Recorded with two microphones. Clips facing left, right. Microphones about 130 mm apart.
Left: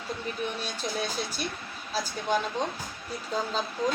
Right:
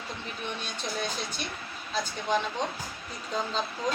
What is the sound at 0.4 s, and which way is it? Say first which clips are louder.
Speech: left 1 dB; 5° left (ahead or behind).